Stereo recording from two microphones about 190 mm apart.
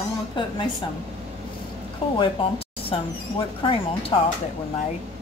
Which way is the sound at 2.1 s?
30° left (ahead or behind).